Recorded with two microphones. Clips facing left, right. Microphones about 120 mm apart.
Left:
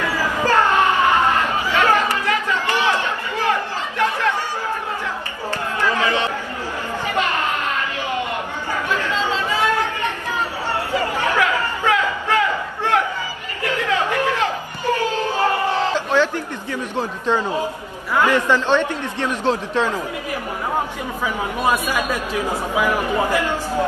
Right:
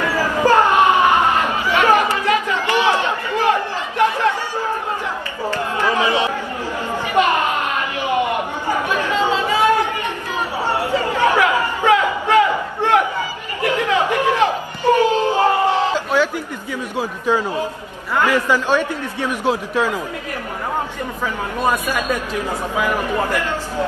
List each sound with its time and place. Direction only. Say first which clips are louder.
0.4 s a sound: right 3 dB; 15° right (ahead or behind)
4.0 s chatter: right 4 dB; 15° right (ahead or behind)
5.8 s chatter: right 2 dB; 15° right (ahead or behind)
16.9 s a man's voice: right 2 dB; 10° right (ahead or behind)
21.5 s a man's voice: right 1 dB; 10° left (ahead or behind)